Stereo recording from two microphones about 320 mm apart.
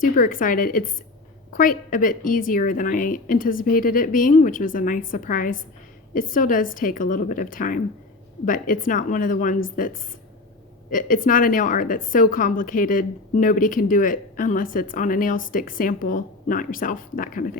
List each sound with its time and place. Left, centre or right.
0.0 s a woman's voice: left